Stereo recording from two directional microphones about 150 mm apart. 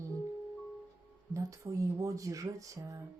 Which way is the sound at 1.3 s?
20° right (ahead or behind).